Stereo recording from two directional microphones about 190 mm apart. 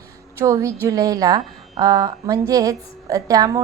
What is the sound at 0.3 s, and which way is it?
A woman's voice, 15° right (ahead or behind).